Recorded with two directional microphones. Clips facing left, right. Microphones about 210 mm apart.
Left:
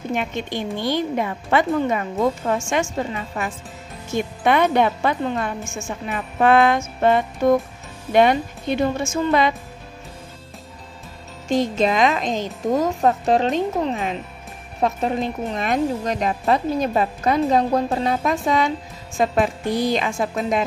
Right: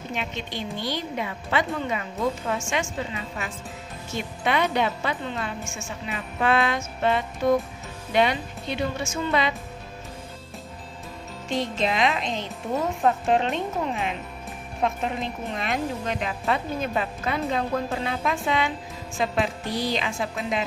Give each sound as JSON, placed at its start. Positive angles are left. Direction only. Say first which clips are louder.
{"t": 0.1, "sound": "speech", "louder": "left 7 dB", "side_deg": 50}
{"t": 11.4, "sound": "speech", "louder": "left 7 dB", "side_deg": 45}